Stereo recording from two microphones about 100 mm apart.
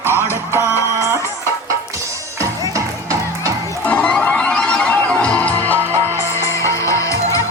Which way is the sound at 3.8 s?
15° left (ahead or behind).